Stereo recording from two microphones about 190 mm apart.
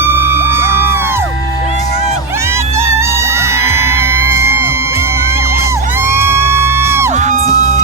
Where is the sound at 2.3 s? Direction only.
15° right (ahead or behind).